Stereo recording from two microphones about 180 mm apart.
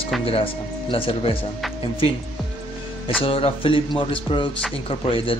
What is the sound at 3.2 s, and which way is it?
Speech, 30° left (ahead or behind).